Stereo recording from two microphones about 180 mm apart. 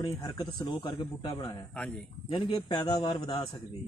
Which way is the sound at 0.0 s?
20° left (ahead or behind).